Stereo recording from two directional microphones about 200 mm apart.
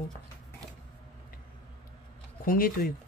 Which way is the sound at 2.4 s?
45° left (ahead or behind).